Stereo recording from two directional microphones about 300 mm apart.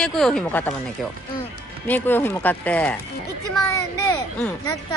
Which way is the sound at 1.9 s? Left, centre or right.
Centre.